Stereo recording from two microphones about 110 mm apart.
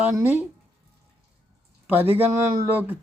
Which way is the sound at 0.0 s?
20° right (ahead or behind).